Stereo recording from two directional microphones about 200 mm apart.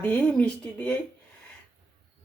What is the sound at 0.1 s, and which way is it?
Speech, 5° left (ahead or behind).